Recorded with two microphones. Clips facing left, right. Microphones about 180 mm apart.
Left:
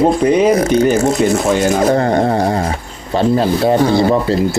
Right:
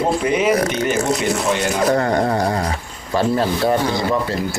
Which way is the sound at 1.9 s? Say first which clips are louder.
Left 4 dB; 30° left (ahead or behind).